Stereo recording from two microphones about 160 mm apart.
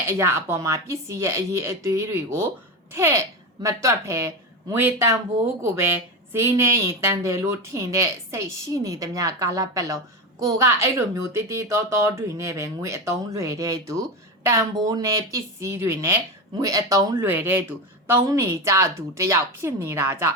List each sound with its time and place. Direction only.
0.1 s a woman's voice: 15° right (ahead or behind)
6.3 s a woman's voice: 15° right (ahead or behind)